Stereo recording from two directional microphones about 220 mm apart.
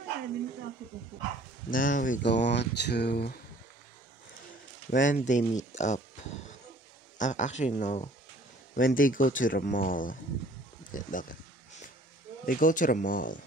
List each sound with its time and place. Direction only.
1.7 s speech: 40° left (ahead or behind)
2.2 s speech: 50° left (ahead or behind)
4.9 s speech: 35° left (ahead or behind)
7.2 s speech: 35° left (ahead or behind)
12.4 s speech: 40° left (ahead or behind)